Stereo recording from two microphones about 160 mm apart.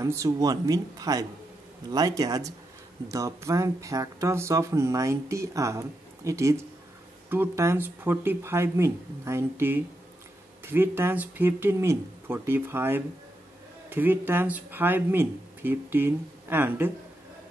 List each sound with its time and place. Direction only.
0.0 s speech: 20° right (ahead or behind)